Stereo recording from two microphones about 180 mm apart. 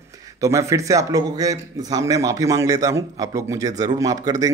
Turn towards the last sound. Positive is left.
turn(degrees=-20)  # may be behind; listen again after turning